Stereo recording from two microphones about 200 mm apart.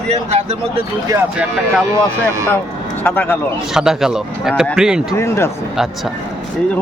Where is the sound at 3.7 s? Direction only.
Centre (ahead or behind).